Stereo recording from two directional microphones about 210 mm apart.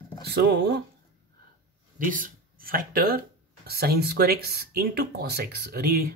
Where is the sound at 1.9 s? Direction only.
40° right (ahead or behind).